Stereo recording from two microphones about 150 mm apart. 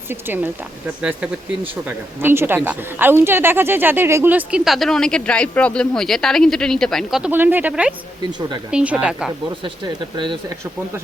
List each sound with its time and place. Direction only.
0.1 s speech: 15° right (ahead or behind)
2.2 s speech: 15° right (ahead or behind)
7.3 s speech: 15° right (ahead or behind)
9.6 s speech: 30° right (ahead or behind)